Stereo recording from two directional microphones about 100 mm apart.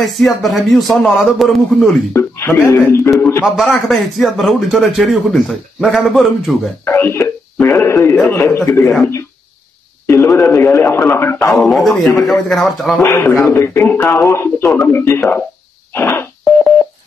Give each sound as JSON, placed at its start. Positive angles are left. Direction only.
{"t": 0.0, "sound": "speech", "side_deg": 0}
{"t": 2.1, "sound": "speech", "side_deg": 25}
{"t": 3.4, "sound": "speech", "side_deg": 0}
{"t": 6.8, "sound": "speech", "side_deg": 25}
{"t": 7.6, "sound": "radio", "side_deg": 25}
{"t": 8.3, "sound": "speech", "side_deg": 20}
{"t": 10.0, "sound": "speech", "side_deg": 30}
{"t": 11.5, "sound": "speech", "side_deg": 0}
{"t": 13.0, "sound": "speech", "side_deg": 25}